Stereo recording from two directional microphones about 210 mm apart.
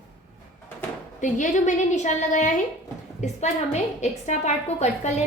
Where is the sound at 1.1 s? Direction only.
35° left (ahead or behind).